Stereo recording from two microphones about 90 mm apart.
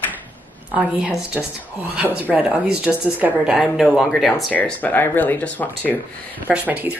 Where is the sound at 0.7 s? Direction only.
15° right (ahead or behind).